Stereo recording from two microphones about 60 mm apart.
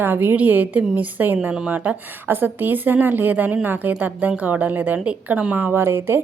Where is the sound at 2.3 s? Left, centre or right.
Right.